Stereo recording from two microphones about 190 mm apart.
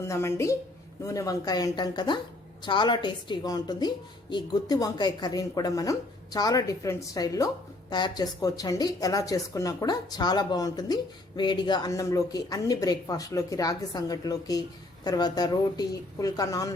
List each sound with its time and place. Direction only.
0.0 s a woman's voice: 15° left (ahead or behind)